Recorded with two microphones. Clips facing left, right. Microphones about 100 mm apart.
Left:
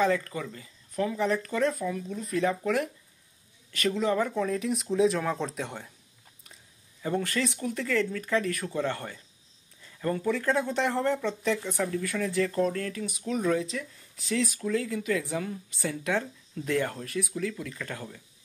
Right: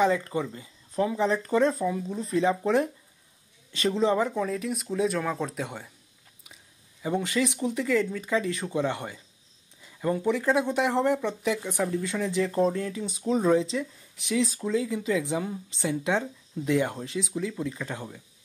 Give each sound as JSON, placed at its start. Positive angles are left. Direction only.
{"t": 0.0, "sound": "speech", "side_deg": -20}
{"t": 4.3, "sound": "speech", "side_deg": -5}